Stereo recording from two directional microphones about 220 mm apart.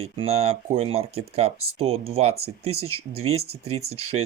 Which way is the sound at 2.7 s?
80° right.